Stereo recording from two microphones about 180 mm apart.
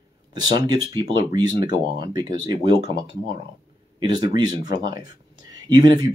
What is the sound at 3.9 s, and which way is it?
Speech, 25° right (ahead or behind).